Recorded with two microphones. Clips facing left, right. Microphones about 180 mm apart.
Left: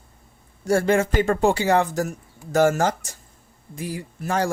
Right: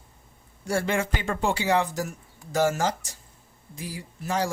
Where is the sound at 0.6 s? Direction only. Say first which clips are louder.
Left 7 dB; 45° left (ahead or behind).